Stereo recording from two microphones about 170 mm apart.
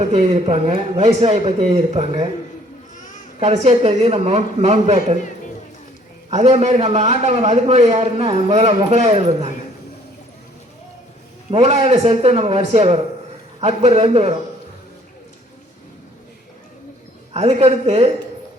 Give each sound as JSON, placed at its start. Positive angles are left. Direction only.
{"t": 0.0, "sound": "a man's voice", "side_deg": -40}
{"t": 3.4, "sound": "a man's voice", "side_deg": -40}
{"t": 6.3, "sound": "a man's voice", "side_deg": -40}
{"t": 11.5, "sound": "a man's voice", "side_deg": -35}
{"t": 17.3, "sound": "a man's voice", "side_deg": -40}